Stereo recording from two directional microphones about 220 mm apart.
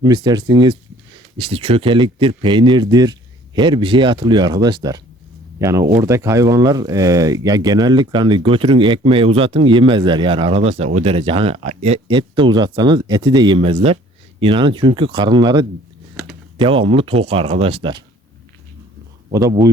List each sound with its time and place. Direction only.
0.0 s speech: 20° right (ahead or behind)
19.3 s speech: 15° right (ahead or behind)